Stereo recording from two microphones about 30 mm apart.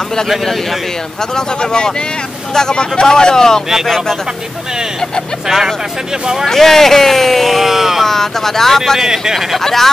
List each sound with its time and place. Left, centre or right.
1.3 s speech: left
6.4 s speech: centre
7.6 s speech: centre
8.0 s speech: centre
9.0 s speech: centre
9.6 s speech: centre